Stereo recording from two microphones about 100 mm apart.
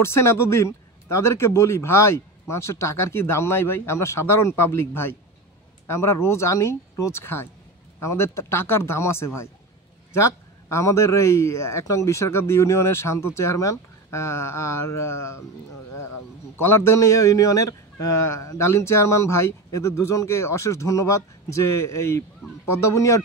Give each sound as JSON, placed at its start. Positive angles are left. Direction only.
{"t": 0.0, "sound": "a man's voice", "side_deg": 25}
{"t": 16.5, "sound": "a man's voice", "side_deg": 25}
{"t": 22.4, "sound": "speech", "side_deg": -5}
{"t": 22.8, "sound": "speech", "side_deg": 30}